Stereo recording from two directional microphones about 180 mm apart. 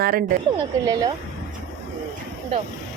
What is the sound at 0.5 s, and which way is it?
Speech, 20° right (ahead or behind).